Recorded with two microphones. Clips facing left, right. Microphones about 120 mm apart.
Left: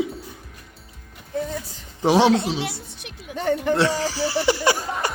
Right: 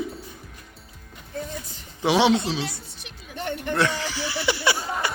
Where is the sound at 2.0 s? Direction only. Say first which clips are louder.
Left 3 dB; 40° left (ahead or behind).